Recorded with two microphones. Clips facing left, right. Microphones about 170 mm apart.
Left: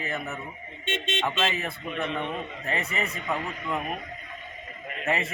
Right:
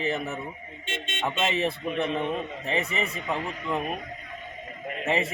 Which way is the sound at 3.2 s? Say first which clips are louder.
Right 1 dB; 20° right (ahead or behind).